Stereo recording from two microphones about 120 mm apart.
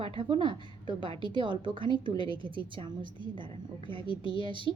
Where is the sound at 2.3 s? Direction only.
45° right (ahead or behind).